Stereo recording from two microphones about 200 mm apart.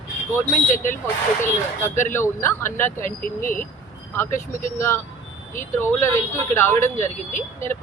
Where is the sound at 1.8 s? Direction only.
10° left (ahead or behind).